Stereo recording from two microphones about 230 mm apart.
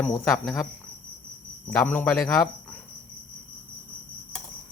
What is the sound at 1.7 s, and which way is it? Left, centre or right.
Speech, centre.